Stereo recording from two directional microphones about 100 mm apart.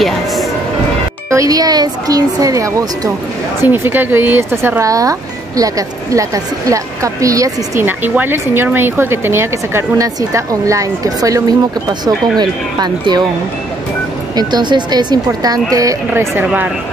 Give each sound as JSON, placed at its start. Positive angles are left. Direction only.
{"t": 1.3, "sound": "a woman's voice", "side_deg": -35}
{"t": 3.6, "sound": "a woman's voice", "side_deg": -20}
{"t": 7.8, "sound": "a woman's voice", "side_deg": -20}
{"t": 12.4, "sound": "speech", "side_deg": -45}
{"t": 14.3, "sound": "speech", "side_deg": -45}
{"t": 16.1, "sound": "a woman's voice", "side_deg": -20}